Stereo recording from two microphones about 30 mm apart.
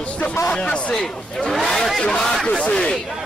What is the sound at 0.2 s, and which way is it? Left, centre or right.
Speech, left.